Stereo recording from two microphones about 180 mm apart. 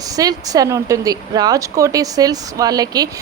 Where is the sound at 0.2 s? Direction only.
20° right (ahead or behind).